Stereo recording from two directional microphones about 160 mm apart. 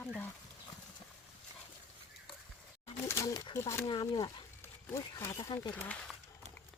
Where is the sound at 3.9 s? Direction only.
25° left (ahead or behind).